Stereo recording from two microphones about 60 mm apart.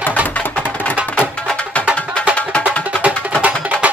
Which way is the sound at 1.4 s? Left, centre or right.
Centre.